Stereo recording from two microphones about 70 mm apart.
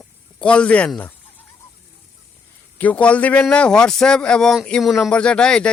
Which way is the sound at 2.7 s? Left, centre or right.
Left.